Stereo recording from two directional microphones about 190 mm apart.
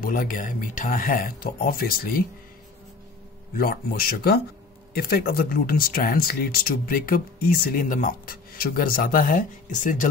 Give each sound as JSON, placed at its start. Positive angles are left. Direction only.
{"t": 0.0, "sound": "speech", "side_deg": 45}
{"t": 3.5, "sound": "speech", "side_deg": 50}